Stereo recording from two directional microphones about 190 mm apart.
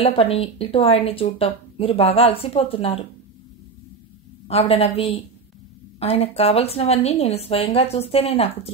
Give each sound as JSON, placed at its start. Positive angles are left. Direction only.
{"t": 0.0, "sound": "speech", "side_deg": 30}
{"t": 4.5, "sound": "speech", "side_deg": 30}